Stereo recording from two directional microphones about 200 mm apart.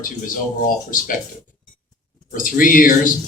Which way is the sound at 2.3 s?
45° left (ahead or behind).